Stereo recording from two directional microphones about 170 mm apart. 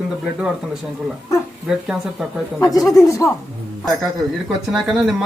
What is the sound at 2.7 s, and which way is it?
Speech, 20° left (ahead or behind).